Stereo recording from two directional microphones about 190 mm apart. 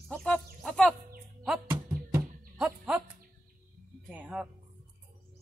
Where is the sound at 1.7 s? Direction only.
15° right (ahead or behind).